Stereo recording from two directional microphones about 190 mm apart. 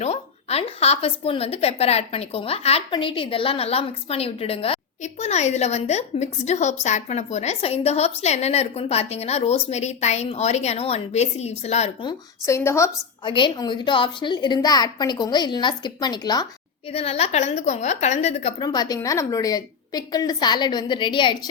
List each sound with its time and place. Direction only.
0.0 s a woman's voice: 35° left (ahead or behind)
12.0 s a woman's voice: 15° left (ahead or behind)
13.2 s a woman's voice: 25° left (ahead or behind)
16.9 s a woman's voice: 30° left (ahead or behind)
18.6 s a woman's voice: 20° left (ahead or behind)